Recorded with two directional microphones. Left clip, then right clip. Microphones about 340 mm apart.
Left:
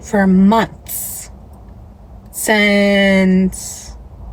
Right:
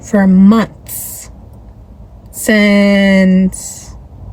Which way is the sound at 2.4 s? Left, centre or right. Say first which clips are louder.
Right 2 dB; centre.